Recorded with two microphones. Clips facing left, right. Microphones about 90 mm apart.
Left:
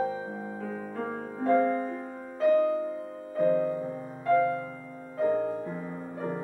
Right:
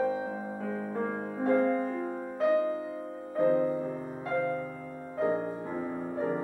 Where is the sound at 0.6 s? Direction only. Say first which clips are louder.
Right 3 dB; 20° right (ahead or behind).